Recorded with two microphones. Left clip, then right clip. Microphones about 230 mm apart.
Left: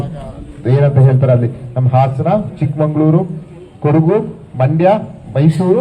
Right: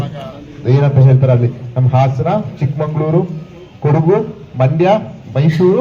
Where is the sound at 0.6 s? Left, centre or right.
Left.